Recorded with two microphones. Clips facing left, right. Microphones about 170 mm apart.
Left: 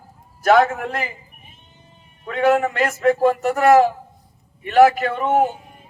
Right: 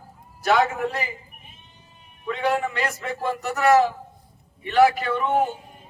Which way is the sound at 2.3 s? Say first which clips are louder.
Left 7 dB; 50° left (ahead or behind).